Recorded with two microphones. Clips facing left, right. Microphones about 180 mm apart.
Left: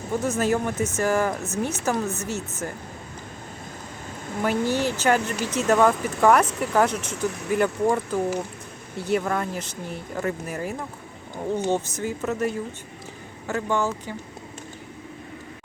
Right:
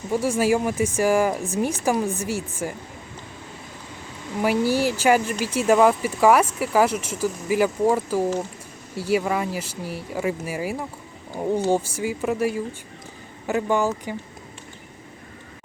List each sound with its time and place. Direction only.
0.1 s speech: 10° right (ahead or behind)
4.4 s speech: 10° right (ahead or behind)
7.3 s speech: 70° left (ahead or behind)
7.5 s speech: 5° right (ahead or behind)